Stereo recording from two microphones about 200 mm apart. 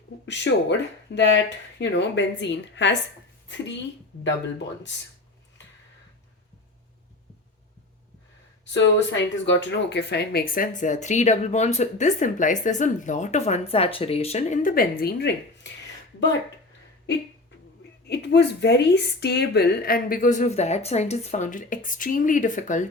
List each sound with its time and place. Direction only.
0.3 s speech: 60° left (ahead or behind)
8.6 s speech: 65° left (ahead or behind)
18.1 s speech: 55° left (ahead or behind); by 22.9 s 40° left (ahead or behind)